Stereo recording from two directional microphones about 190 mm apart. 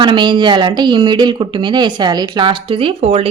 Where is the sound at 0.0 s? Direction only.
25° right (ahead or behind).